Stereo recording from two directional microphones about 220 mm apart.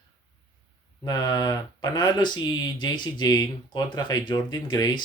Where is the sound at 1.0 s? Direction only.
15° left (ahead or behind).